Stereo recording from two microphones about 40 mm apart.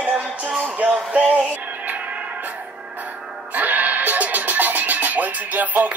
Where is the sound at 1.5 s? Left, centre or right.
Right.